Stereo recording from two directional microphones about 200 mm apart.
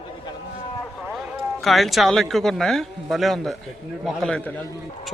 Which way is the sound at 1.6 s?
Centre (ahead or behind).